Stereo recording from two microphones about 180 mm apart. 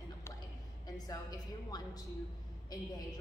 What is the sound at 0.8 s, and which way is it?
A woman's voice, 20° left (ahead or behind).